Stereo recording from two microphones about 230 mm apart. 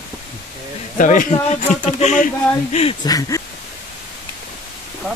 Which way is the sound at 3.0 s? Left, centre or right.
Centre.